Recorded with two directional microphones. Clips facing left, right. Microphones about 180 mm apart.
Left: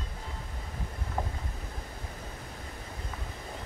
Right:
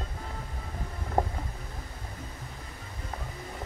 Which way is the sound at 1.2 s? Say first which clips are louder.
Right 7 dB; 45° right (ahead or behind).